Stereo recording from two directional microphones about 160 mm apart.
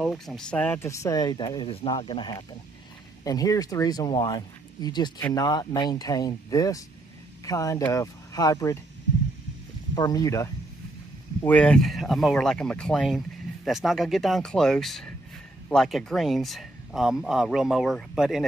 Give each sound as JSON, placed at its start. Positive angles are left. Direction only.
{"t": 0.0, "sound": "speech", "side_deg": 5}
{"t": 9.9, "sound": "speech", "side_deg": 25}
{"t": 11.4, "sound": "speech", "side_deg": 10}